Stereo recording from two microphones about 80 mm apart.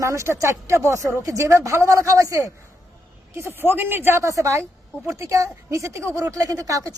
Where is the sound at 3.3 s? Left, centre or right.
Right.